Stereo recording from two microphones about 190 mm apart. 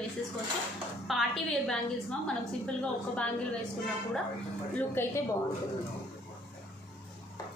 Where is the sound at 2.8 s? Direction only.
5° left (ahead or behind).